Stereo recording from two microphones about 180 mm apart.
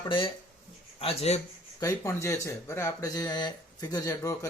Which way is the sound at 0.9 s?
35° left (ahead or behind).